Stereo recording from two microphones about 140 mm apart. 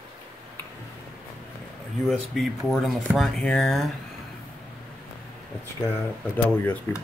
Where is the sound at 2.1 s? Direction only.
Centre (ahead or behind).